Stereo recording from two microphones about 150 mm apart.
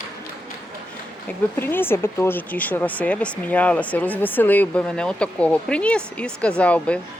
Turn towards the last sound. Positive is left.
turn(degrees=10)  # may be behind; listen again after turning